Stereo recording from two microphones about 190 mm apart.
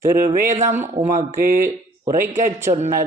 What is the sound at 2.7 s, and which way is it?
Speech, 40° right (ahead or behind).